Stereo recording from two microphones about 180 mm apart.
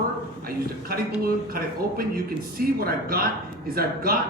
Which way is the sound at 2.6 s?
55° right (ahead or behind).